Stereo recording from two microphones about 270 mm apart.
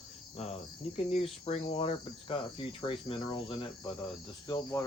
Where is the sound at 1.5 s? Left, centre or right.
Left.